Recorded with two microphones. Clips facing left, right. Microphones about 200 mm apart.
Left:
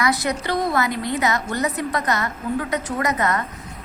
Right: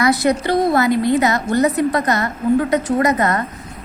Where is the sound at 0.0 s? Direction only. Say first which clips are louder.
Right 6 dB; 30° right (ahead or behind).